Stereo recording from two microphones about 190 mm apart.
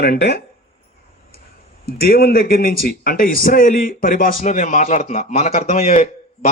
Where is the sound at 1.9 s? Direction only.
55° left (ahead or behind).